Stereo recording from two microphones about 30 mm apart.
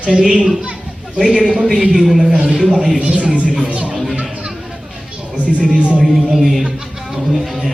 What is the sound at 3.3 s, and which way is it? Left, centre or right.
Speech, right.